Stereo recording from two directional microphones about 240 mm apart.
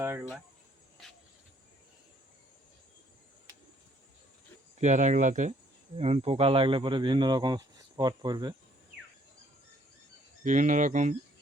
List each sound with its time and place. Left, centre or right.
4.8 s speech: right
10.4 s speech: right